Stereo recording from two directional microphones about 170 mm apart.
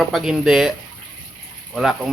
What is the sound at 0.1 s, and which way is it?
Speech, 5° right (ahead or behind).